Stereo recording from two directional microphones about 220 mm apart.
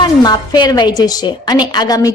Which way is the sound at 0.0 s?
20° left (ahead or behind).